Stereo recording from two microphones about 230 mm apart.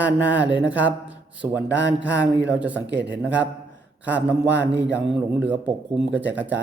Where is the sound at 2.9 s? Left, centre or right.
Right.